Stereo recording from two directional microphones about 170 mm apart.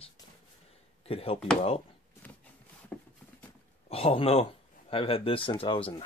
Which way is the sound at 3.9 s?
35° left (ahead or behind).